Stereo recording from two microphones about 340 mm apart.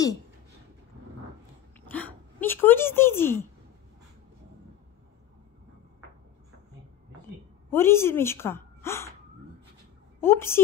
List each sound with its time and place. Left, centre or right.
1.9 s speech: centre
7.7 s a woman's voice: centre
10.2 s a woman's voice: centre